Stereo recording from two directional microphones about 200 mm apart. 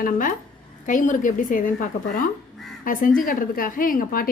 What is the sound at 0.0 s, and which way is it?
A woman's voice, 40° left (ahead or behind).